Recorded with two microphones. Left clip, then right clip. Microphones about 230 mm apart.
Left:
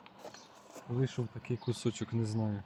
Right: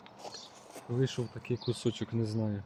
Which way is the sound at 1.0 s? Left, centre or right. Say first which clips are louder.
Right 3 dB; left.